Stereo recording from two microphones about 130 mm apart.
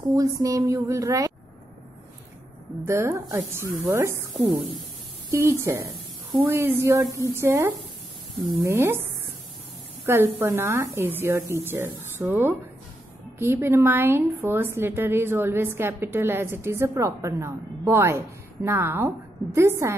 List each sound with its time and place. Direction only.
0.1 s a woman's voice: 25° right (ahead or behind)
2.9 s a woman's voice: 20° right (ahead or behind)
10.0 s a woman's voice: 20° right (ahead or behind)